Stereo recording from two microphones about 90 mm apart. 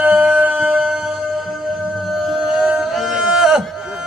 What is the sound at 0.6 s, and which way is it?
Music, 5° right (ahead or behind).